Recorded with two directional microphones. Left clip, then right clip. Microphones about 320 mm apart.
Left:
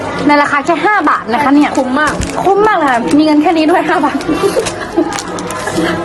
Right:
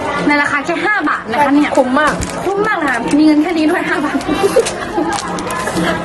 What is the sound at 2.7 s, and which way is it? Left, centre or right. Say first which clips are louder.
Speech: left 4 dB; centre.